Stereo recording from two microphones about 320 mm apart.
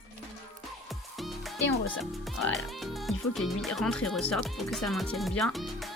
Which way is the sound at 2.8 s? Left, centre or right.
Centre.